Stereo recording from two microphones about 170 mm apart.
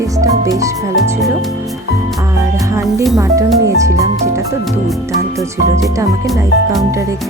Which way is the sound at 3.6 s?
20° right (ahead or behind).